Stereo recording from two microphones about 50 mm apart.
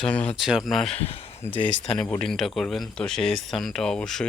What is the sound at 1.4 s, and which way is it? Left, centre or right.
Speech, left.